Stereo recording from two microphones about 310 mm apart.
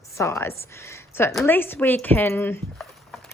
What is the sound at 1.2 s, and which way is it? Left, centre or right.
A woman's voice, centre.